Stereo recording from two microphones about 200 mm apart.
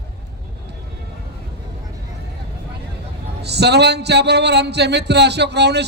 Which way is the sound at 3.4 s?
55° right (ahead or behind).